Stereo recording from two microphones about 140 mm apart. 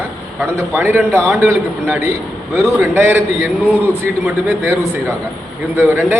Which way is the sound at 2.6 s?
15° right (ahead or behind).